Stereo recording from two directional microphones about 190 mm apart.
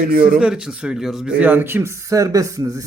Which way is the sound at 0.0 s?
50° right (ahead or behind).